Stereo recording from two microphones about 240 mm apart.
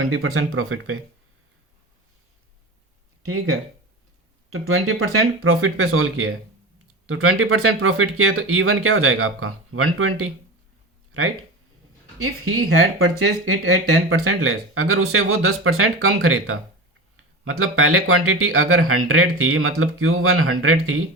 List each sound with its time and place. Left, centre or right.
0.0 s speech: right
3.2 s speech: right
4.5 s speech: right
12.2 s speech: right